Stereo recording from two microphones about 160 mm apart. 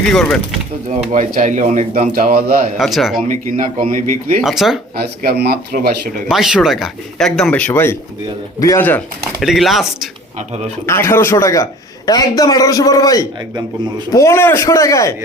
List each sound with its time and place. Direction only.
0.0 s speech: centre (ahead or behind)
0.9 s a man's voice: 45° right (ahead or behind); by 2.6 s 60° right (ahead or behind)
2.7 s speech: centre (ahead or behind)
3.2 s a man's voice: 55° right (ahead or behind)
4.4 s speech: centre (ahead or behind)
4.9 s speech: 80° right
6.2 s a man's voice: centre (ahead or behind); by 9.0 s 15° left (ahead or behind)
9.4 s speech: centre (ahead or behind)
10.8 s a man's voice: 15° left (ahead or behind)